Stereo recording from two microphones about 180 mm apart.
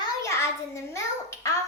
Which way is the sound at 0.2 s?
15° left (ahead or behind).